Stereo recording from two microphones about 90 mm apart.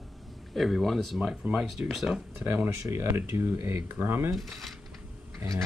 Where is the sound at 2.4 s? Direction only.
25° right (ahead or behind).